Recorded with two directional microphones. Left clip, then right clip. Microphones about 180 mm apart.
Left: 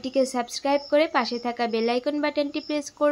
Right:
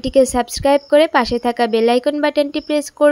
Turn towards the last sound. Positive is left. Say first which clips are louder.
# right 10 dB
turn(degrees=-35)  # may be behind; listen again after turning